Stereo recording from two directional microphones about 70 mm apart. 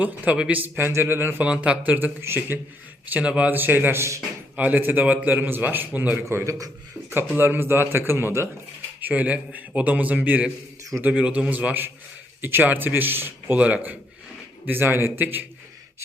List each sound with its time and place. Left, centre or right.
0.3 s a man's voice: centre
1.5 s a man's voice: centre; by 2.6 s right
3.1 s a man's voice: centre
3.5 s a man's voice: right
6.1 s a man's voice: right
7.3 s a man's voice: right
9.0 s a man's voice: right
13.6 s a man's voice: centre
14.7 s a man's voice: right